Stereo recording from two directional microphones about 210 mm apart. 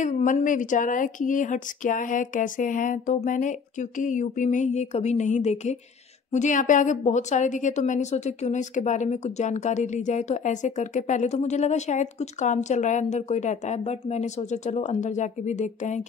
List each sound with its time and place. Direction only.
0.0 s a woman's voice: 35° left (ahead or behind)